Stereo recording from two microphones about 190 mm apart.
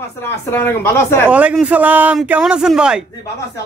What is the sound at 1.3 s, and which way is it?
Speech, 5° right (ahead or behind).